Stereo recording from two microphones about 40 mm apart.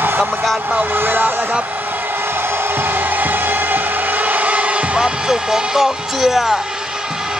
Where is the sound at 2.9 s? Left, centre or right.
Right; by 6.6 s centre.